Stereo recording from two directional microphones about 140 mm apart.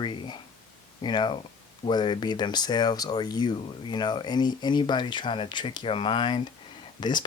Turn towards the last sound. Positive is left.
turn(degrees=30)  # may be behind; listen again after turning